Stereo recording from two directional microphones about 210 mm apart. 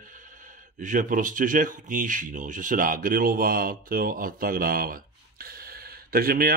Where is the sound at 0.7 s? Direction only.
40° right (ahead or behind).